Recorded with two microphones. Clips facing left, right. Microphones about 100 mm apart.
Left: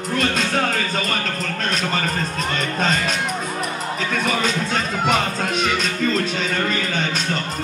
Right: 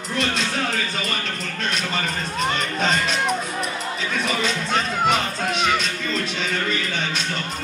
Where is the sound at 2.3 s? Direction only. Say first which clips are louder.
Even; 40° left (ahead or behind).